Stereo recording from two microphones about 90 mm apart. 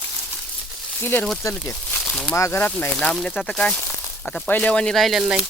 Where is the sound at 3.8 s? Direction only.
30° left (ahead or behind).